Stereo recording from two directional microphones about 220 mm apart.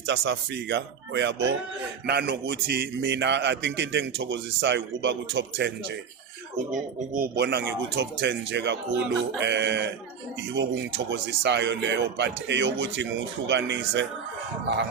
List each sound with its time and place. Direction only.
0.1 s a man's voice: 55° right (ahead or behind)
7.1 s a man's voice: 45° right (ahead or behind)